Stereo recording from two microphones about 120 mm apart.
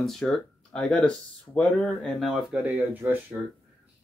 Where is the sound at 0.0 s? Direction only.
5° left (ahead or behind).